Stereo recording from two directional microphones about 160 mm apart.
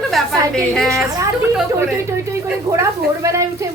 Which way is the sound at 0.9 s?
20° right (ahead or behind).